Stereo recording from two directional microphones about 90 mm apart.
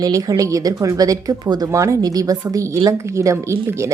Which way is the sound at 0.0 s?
40° right (ahead or behind).